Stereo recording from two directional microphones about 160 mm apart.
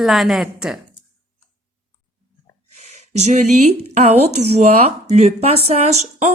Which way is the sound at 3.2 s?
45° right (ahead or behind).